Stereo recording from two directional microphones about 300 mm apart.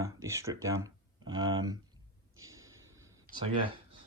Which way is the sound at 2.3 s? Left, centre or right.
Centre.